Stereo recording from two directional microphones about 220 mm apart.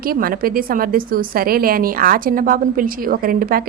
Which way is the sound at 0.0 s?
40° right (ahead or behind).